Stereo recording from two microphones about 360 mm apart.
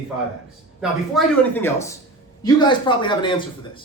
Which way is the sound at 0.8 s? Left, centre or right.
Centre.